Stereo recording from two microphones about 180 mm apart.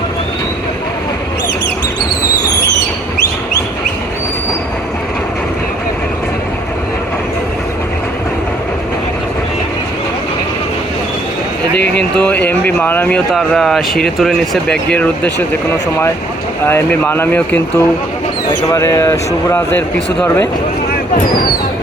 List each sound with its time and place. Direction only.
12.1 s speech: 10° left (ahead or behind)
16.6 s speech: 15° left (ahead or behind)